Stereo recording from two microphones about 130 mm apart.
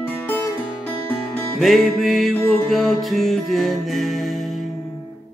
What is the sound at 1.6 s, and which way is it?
Music, centre (ahead or behind).